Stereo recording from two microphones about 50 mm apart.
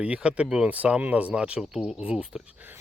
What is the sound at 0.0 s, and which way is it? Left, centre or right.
Speech, right.